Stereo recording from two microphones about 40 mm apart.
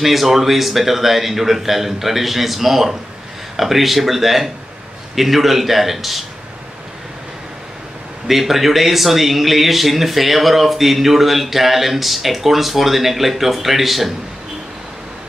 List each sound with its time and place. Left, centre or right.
0.0 s speech: centre
8.3 s speech: centre